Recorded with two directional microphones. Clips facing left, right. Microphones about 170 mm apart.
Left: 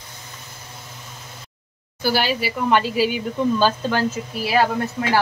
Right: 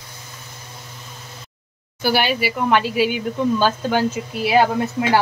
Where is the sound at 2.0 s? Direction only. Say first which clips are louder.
Right 2 dB; 60° right (ahead or behind).